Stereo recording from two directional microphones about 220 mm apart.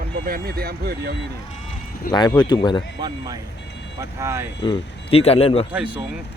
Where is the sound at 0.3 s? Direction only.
45° right (ahead or behind).